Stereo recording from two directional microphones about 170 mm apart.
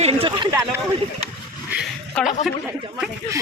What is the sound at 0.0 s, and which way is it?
Speech, 35° right (ahead or behind).